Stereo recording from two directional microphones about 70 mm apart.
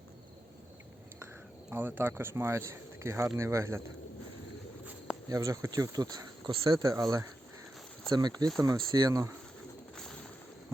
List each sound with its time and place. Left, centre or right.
1.7 s speech: right
5.3 s speech: right
5.9 s speech: right
8.1 s speech: right
8.6 s speech: right
9.9 s bird: centre